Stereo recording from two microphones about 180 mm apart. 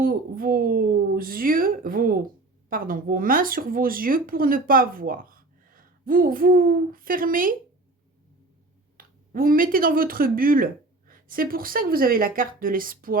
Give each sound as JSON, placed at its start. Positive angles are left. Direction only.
{"t": 0.0, "sound": "speech", "side_deg": -55}
{"t": 9.0, "sound": "speech", "side_deg": -50}